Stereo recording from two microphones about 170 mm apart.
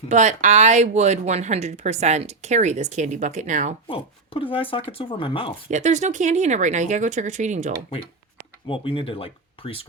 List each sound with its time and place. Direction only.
0.1 s speech: 45° right (ahead or behind)
3.8 s speech: 30° left (ahead or behind)
5.7 s speech: 45° right (ahead or behind)
8.6 s speech: 30° left (ahead or behind)